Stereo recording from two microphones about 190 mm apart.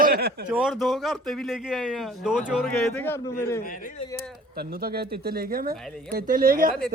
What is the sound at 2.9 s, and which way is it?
Speech, 10° left (ahead or behind).